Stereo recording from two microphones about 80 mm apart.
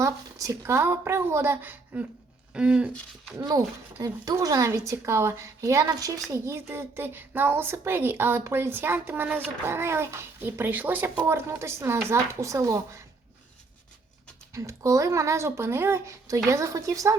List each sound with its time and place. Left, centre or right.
0.0 s speech: right
2.5 s speech: centre
4.0 s speech: right
4.9 s speech: right
6.3 s a woman's voice: right
11.3 s speech: right
14.5 s speech: right